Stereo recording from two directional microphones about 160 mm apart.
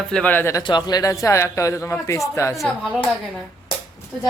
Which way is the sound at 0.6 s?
25° left (ahead or behind).